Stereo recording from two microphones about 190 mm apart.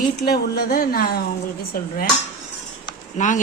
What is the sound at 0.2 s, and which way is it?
Speech, 60° left (ahead or behind).